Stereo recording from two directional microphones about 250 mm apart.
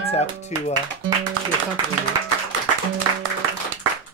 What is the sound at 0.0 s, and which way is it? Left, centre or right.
Music, left.